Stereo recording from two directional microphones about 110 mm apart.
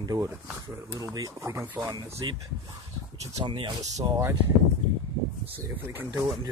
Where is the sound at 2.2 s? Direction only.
40° right (ahead or behind).